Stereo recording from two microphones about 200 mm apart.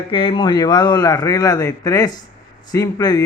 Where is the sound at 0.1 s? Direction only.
25° left (ahead or behind).